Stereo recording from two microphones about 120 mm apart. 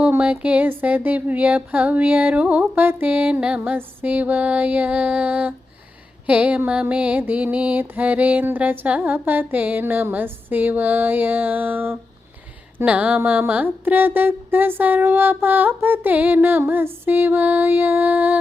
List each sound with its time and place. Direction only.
0.0 s mantra: 10° right (ahead or behind)